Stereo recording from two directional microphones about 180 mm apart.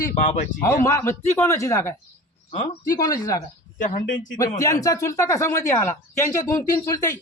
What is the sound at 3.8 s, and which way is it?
Speech, 45° left (ahead or behind).